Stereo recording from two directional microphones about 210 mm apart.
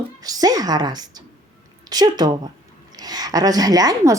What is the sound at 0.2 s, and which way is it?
A woman's voice, 15° right (ahead or behind).